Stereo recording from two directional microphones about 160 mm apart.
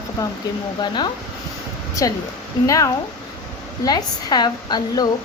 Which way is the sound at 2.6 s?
20° left (ahead or behind).